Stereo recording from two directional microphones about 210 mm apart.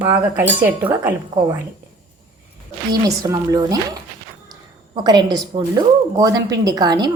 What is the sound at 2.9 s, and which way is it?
A woman's voice, 15° right (ahead or behind).